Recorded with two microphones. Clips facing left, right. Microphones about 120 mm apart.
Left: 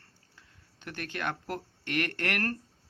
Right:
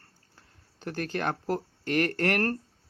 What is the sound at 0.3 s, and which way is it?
Speech, 40° right (ahead or behind).